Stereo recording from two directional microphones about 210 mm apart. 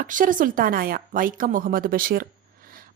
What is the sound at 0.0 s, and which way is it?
A woman's voice, 40° right (ahead or behind).